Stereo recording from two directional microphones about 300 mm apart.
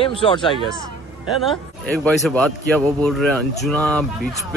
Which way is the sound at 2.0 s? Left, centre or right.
Centre.